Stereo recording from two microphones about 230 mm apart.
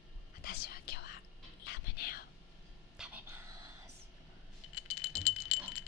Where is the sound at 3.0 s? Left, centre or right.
Centre.